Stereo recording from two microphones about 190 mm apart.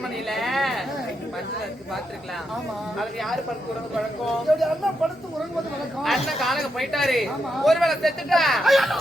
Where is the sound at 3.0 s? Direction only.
Centre (ahead or behind).